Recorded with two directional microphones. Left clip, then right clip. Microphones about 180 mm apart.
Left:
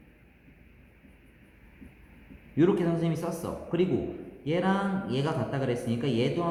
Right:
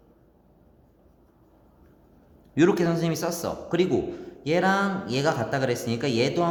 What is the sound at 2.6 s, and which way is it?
Speech, 45° right (ahead or behind).